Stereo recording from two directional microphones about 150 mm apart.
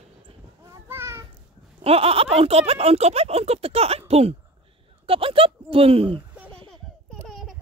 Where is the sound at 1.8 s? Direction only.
40° right (ahead or behind).